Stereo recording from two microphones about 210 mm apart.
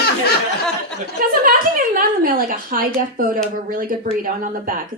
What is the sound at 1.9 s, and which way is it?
A woman's voice, 40° right (ahead or behind).